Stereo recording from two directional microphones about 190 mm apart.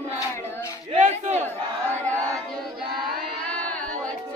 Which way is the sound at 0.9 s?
40° right (ahead or behind).